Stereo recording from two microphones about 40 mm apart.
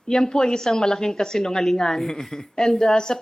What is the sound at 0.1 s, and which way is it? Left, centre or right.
A woman's voice, centre.